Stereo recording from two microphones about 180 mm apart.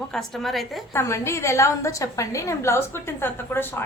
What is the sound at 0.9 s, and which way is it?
A woman's voice, 15° left (ahead or behind).